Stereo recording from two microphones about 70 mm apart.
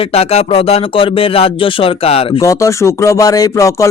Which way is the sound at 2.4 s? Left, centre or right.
Left.